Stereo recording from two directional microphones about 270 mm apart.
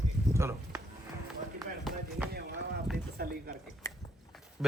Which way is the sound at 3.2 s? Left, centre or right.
Right.